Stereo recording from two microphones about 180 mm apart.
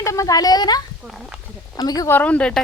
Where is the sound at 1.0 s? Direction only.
5° right (ahead or behind).